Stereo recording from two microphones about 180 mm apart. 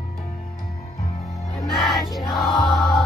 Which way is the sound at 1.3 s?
Centre (ahead or behind).